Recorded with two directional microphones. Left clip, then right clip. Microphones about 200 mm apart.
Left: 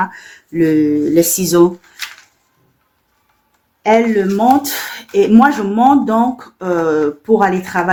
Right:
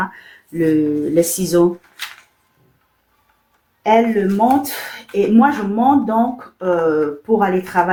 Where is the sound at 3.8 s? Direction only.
40° left (ahead or behind).